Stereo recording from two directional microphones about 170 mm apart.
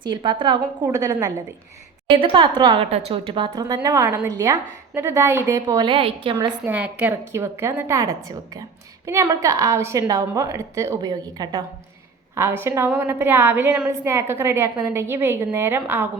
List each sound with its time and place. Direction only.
0.0 s a woman's voice: 25° right (ahead or behind)
2.2 s a woman's voice: 30° right (ahead or behind)
6.7 s a woman's voice: 10° right (ahead or behind)